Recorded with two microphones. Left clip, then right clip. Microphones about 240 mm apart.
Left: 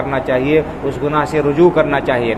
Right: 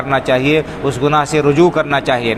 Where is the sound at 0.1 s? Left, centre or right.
Right.